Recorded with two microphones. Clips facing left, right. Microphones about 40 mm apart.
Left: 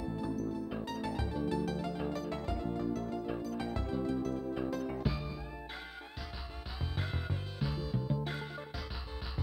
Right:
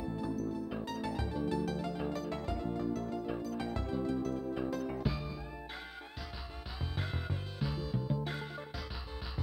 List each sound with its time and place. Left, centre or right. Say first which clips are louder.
0.2 s music: even; centre
7.6 s music: even; centre